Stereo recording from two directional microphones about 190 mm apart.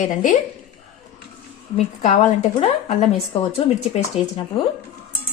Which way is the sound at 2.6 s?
35° left (ahead or behind).